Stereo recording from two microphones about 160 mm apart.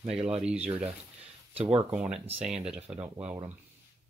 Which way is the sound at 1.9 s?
10° right (ahead or behind).